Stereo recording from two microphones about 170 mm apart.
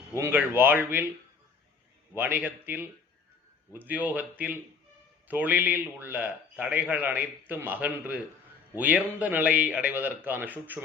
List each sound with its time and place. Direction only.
0.2 s a man's voice: 10° right (ahead or behind)
2.1 s a man's voice: 10° right (ahead or behind)